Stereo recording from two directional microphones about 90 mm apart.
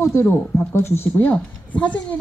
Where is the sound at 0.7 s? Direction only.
25° left (ahead or behind).